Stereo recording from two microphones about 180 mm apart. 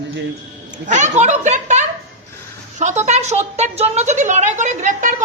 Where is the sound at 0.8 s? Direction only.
40° right (ahead or behind).